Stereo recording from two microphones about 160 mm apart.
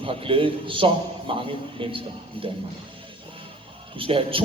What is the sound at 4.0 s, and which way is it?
Speech, 35° right (ahead or behind).